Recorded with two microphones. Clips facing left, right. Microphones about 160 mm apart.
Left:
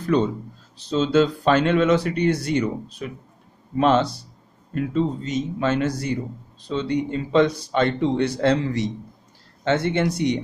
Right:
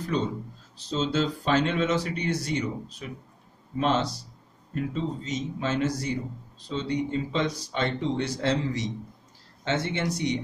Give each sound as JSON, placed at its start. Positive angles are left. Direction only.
{"t": 0.1, "sound": "speech", "side_deg": 60}